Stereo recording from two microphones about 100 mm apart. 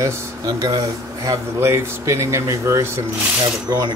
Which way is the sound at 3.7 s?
40° right (ahead or behind).